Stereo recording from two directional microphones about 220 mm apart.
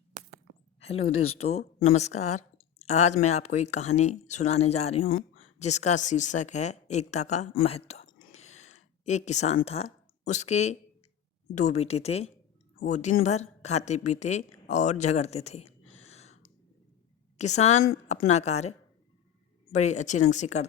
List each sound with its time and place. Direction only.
0.1 s a sound: 30° right (ahead or behind)
0.8 s speech: 25° left (ahead or behind)
1.1 s speech: 75° left (ahead or behind)
1.4 s speech: 30° left (ahead or behind)
7.9 s whispering: 30° left (ahead or behind)
10.2 s a woman's voice: 30° left (ahead or behind)